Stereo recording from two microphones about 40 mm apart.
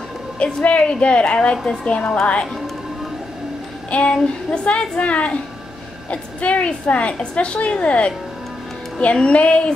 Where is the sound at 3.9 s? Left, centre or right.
Left.